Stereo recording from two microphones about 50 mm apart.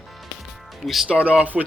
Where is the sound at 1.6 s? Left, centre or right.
Centre.